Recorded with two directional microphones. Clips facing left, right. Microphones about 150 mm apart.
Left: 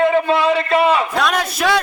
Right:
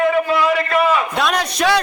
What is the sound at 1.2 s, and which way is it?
Speech, centre (ahead or behind).